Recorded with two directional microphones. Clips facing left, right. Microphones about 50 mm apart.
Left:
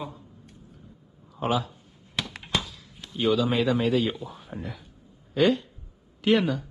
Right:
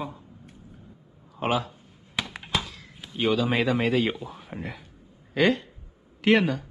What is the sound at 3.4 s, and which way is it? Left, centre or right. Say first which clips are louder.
Speech: even; right.